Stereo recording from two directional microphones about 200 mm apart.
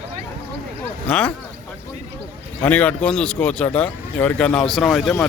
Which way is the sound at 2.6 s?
5° left (ahead or behind).